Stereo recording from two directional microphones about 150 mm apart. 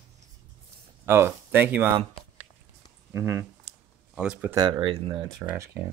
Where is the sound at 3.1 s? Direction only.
20° right (ahead or behind).